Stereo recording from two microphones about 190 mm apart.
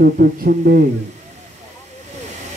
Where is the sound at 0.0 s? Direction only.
50° right (ahead or behind).